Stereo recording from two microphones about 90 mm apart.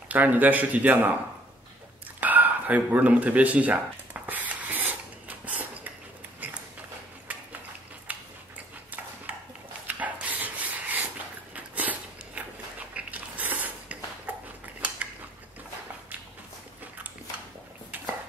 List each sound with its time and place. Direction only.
0.1 s speech: 20° right (ahead or behind)
2.1 s bow-wow: 20° right (ahead or behind)
7.3 s cutlery: 15° right (ahead or behind)
8.1 s a sound: 20° right (ahead or behind)
9.8 s dog: 15° right (ahead or behind)
11.5 s a sound: 15° right (ahead or behind)